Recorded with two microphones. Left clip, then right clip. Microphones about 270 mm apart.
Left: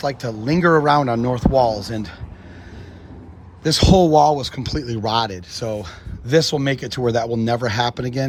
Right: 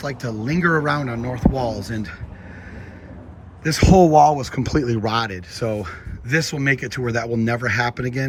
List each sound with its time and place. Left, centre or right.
0.0 s speech: centre
3.6 s speech: centre